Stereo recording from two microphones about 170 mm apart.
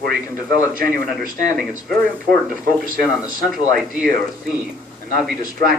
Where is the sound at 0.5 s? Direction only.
55° right (ahead or behind).